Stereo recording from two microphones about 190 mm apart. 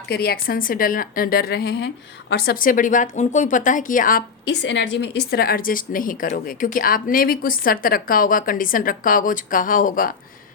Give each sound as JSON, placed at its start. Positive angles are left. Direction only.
{"t": 0.1, "sound": "speech", "side_deg": 55}